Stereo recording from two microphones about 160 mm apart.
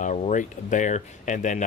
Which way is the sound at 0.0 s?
50° left (ahead or behind).